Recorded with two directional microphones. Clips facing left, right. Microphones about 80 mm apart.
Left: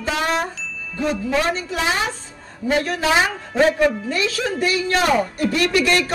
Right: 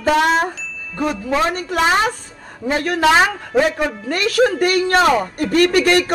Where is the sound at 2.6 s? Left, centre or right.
Right.